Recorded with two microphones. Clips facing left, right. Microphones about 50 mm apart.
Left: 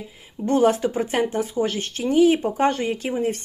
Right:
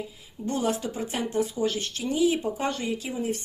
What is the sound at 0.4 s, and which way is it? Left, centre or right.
Speech, left.